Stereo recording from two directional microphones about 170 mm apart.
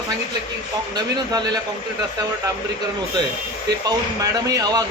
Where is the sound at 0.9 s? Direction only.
25° right (ahead or behind).